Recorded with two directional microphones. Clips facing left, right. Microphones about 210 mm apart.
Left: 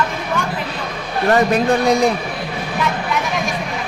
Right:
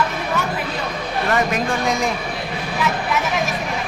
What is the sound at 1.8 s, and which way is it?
Speech, 35° left (ahead or behind).